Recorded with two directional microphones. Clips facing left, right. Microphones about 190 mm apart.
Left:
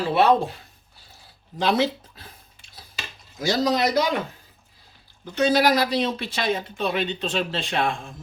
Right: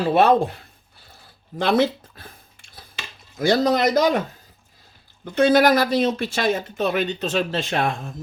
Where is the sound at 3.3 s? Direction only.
55° right (ahead or behind).